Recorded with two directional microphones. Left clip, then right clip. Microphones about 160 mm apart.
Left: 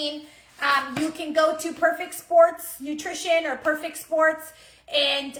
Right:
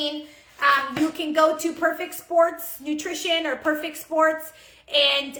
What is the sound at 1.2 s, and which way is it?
A woman's voice, 25° right (ahead or behind).